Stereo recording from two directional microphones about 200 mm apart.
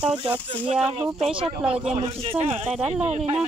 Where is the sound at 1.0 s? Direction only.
5° right (ahead or behind).